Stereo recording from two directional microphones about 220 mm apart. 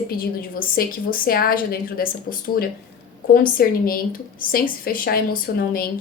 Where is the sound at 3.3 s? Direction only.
40° left (ahead or behind).